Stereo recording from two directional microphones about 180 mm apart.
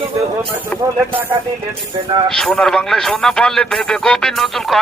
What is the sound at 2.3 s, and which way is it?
A man's voice, 5° left (ahead or behind).